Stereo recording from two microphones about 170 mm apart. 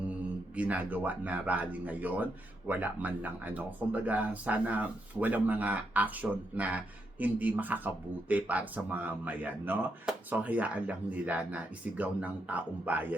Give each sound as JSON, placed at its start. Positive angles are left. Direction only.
{"t": 0.5, "sound": "speech", "side_deg": -10}